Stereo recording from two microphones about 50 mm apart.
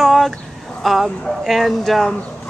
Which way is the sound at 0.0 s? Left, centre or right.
Centre.